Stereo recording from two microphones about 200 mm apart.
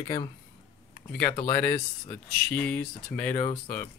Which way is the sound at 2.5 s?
5° left (ahead or behind).